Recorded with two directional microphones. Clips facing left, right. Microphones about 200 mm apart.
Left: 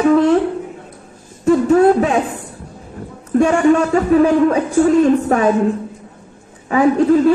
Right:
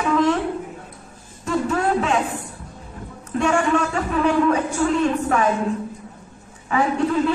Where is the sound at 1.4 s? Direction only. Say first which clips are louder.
Left 11 dB; 40° left (ahead or behind).